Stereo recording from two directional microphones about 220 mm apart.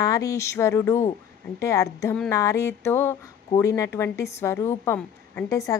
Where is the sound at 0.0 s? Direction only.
15° left (ahead or behind).